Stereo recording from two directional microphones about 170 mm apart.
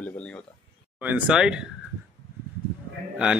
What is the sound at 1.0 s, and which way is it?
Speech, 5° right (ahead or behind).